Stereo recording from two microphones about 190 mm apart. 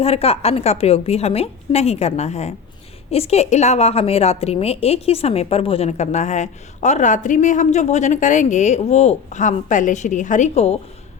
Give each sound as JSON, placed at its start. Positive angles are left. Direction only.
{"t": 0.0, "sound": "a woman's voice", "side_deg": 30}